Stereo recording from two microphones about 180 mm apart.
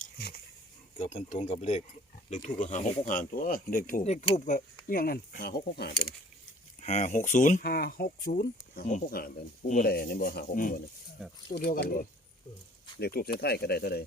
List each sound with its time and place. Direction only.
1.1 s speech: 40° left (ahead or behind)
4.9 s speech: 55° left (ahead or behind)
6.8 s speech: 40° left (ahead or behind)
11.2 s speech: 5° right (ahead or behind)
11.5 s speech: 60° left (ahead or behind)